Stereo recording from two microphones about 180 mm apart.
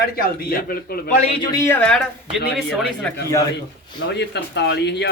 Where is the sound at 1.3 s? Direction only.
20° left (ahead or behind).